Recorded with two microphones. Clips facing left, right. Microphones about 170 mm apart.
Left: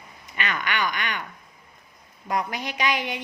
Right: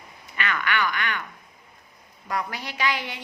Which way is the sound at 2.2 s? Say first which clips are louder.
Left 3 dB; 20° left (ahead or behind).